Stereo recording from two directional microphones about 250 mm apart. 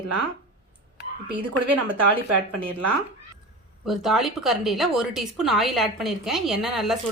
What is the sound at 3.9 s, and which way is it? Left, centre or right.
Speech, centre.